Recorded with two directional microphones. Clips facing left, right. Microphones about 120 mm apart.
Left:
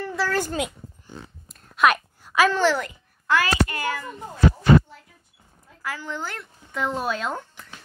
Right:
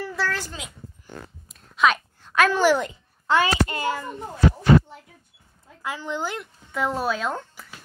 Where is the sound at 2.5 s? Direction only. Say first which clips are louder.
Right 2 dB; 15° right (ahead or behind).